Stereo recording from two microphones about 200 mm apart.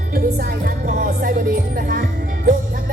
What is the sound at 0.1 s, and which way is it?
Music, 50° right (ahead or behind).